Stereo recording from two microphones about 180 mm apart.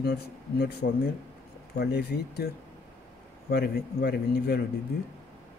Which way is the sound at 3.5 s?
60° left (ahead or behind).